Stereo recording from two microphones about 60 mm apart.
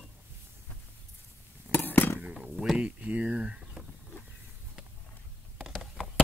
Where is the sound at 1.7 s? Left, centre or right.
Left.